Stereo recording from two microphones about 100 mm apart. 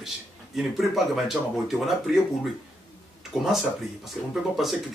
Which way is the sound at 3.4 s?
Centre (ahead or behind).